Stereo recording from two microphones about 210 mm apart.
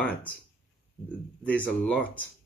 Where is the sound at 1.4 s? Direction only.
5° left (ahead or behind).